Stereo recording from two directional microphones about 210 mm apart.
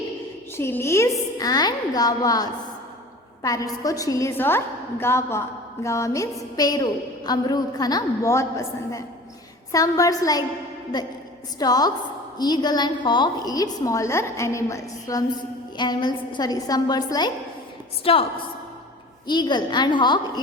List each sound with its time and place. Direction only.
0.5 s a woman's voice: 10° left (ahead or behind)
11.6 s a woman's voice: 20° left (ahead or behind)
19.3 s a woman's voice: 20° left (ahead or behind)